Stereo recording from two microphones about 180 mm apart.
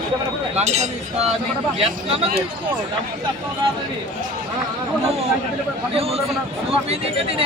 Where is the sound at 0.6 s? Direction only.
40° right (ahead or behind).